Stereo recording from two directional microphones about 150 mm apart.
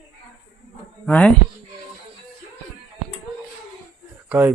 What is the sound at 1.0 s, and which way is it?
Speech, 5° left (ahead or behind).